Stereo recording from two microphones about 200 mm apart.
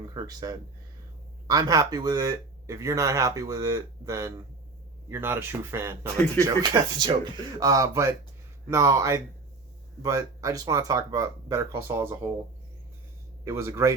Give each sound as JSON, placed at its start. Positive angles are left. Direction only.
{"t": 0.1, "sound": "speech", "side_deg": -20}
{"t": 13.4, "sound": "speech", "side_deg": -10}